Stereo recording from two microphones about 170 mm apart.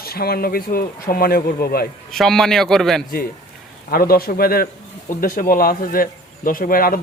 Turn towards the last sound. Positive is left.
turn(degrees=60)  # may be behind; listen again after turning